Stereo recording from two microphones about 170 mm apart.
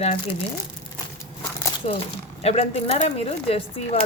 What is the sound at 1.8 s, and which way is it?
Speech, 40° left (ahead or behind).